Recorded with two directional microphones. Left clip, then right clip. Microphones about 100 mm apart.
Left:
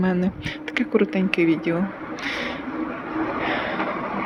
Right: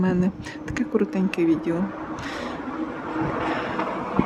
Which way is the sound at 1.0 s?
20° right (ahead or behind).